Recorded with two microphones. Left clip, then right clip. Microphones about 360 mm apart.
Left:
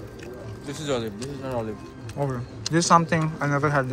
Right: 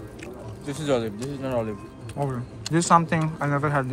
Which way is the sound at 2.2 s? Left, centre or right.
Centre.